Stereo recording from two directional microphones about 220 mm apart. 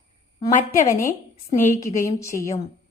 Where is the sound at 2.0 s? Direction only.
15° left (ahead or behind).